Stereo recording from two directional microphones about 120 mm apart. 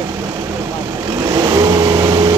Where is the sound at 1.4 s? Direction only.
30° right (ahead or behind).